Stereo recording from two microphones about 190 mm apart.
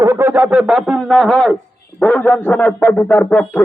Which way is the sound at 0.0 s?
15° right (ahead or behind).